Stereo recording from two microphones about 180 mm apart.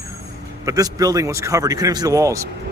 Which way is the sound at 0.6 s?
20° right (ahead or behind).